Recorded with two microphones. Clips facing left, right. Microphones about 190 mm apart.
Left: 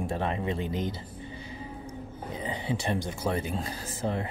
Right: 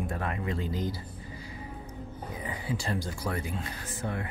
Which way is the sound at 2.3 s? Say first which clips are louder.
Left 3 dB; 25° left (ahead or behind).